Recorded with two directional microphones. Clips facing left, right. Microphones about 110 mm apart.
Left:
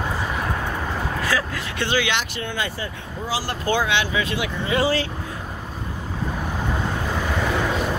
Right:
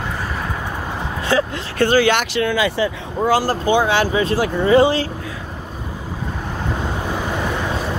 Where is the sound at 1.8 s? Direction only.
45° right (ahead or behind).